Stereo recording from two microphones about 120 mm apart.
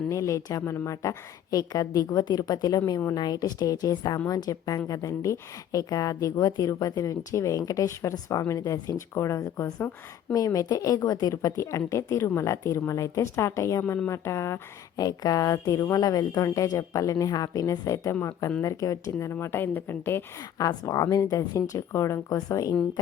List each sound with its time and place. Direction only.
0.1 s a woman's voice: 25° left (ahead or behind)
20.6 s a woman's voice: 30° left (ahead or behind)